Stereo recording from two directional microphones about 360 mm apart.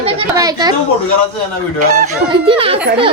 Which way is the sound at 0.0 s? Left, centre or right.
Centre.